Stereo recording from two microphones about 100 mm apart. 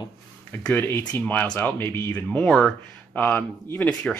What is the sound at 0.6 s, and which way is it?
Speech, 25° left (ahead or behind).